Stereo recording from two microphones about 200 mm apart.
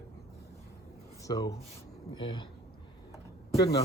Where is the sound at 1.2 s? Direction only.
20° left (ahead or behind).